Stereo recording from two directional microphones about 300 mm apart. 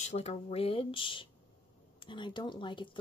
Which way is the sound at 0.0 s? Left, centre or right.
Left.